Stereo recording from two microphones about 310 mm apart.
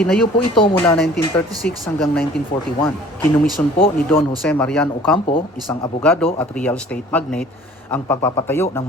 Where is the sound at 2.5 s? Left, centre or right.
Left.